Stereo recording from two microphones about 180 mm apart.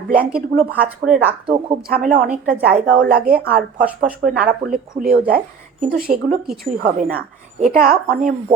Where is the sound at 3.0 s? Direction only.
55° right (ahead or behind).